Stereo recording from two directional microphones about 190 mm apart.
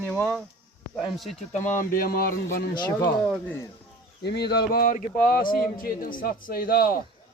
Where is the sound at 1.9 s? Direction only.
50° left (ahead or behind).